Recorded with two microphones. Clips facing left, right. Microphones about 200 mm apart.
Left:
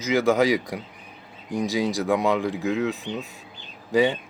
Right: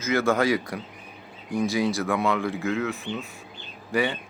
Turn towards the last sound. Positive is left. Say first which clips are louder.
# left 5 dB
turn(degrees=20)  # may be behind; listen again after turning